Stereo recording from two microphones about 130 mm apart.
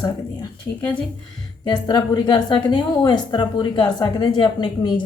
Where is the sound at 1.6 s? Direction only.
35° left (ahead or behind).